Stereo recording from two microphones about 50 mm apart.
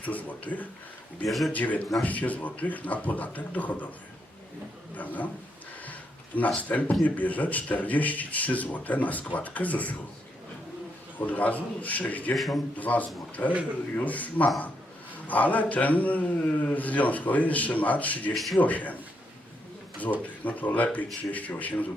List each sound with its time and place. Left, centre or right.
0.0 s a man's voice: left
1.3 s a man's voice: centre
1.5 s a man's voice: left
4.9 s a man's voice: left
5.8 s a sound: left
6.6 s a man's voice: left
11.2 s a man's voice: left
12.3 s a man's voice: centre
12.7 s a man's voice: left
18.3 s a man's voice: centre
18.6 s a man's voice: left
20.0 s a man's voice: left